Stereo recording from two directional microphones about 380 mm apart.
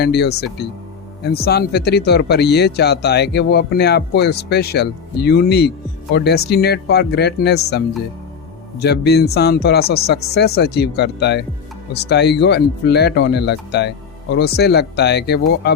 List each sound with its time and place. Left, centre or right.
0.0 s speech: left
8.8 s speech: left